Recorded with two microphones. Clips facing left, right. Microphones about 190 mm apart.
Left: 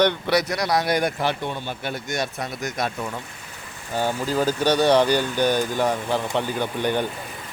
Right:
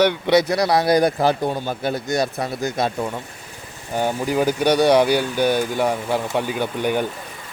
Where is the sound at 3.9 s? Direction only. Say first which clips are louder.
Right 3 dB; 15° right (ahead or behind).